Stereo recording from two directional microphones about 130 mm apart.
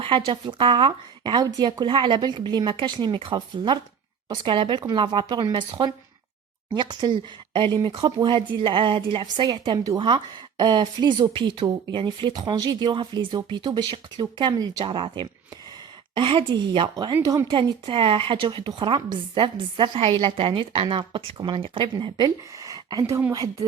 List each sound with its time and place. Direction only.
0.0 s speech: 40° right (ahead or behind)